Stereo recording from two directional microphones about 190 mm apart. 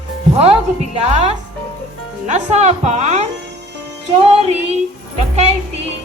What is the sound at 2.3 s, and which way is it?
Speech, 40° right (ahead or behind).